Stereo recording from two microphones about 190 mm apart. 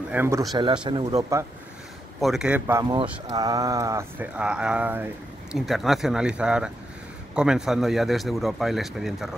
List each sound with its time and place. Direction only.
0.1 s speech: 15° right (ahead or behind)
2.1 s speech: centre (ahead or behind)